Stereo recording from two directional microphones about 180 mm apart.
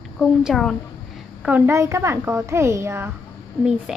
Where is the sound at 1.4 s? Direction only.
10° right (ahead or behind).